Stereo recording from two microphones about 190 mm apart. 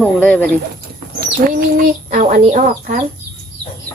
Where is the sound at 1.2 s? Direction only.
50° right (ahead or behind).